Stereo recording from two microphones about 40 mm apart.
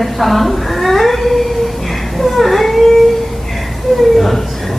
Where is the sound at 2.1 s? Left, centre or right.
Centre.